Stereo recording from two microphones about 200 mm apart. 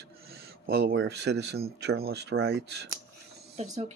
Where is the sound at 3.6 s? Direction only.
35° right (ahead or behind).